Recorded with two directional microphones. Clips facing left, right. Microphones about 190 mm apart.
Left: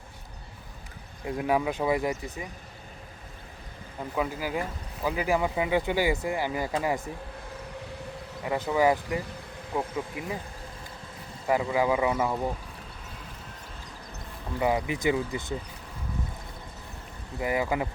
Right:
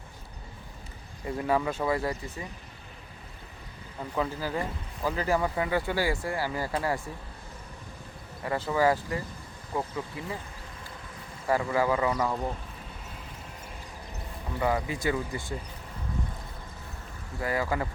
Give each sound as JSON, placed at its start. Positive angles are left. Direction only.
{"t": 1.2, "sound": "speech", "side_deg": 10}
{"t": 4.1, "sound": "speech", "side_deg": 10}
{"t": 8.4, "sound": "speech", "side_deg": 15}
{"t": 11.4, "sound": "speech", "side_deg": 15}
{"t": 14.6, "sound": "speech", "side_deg": 15}
{"t": 17.4, "sound": "speech", "side_deg": 15}